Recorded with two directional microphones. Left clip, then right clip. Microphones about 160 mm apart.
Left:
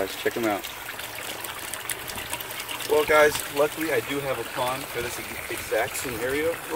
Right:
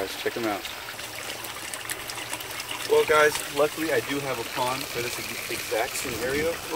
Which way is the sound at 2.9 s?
60° left (ahead or behind).